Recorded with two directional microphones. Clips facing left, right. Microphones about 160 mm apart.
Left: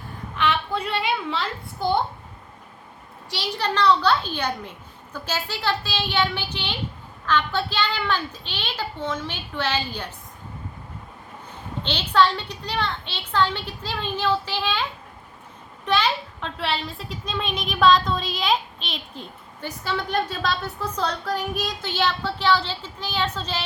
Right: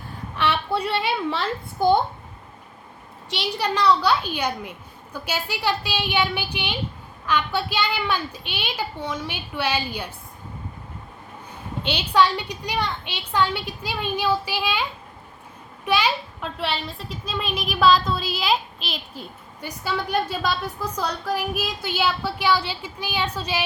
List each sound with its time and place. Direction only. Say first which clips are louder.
0.7 s a woman's voice: right 2 dB; 35° right (ahead or behind)
3.2 s a child's voice: right 1 dB; 15° right (ahead or behind)
11.8 s a child's voice: even; 10° right (ahead or behind)
15.9 s a child's voice: even; 10° right (ahead or behind)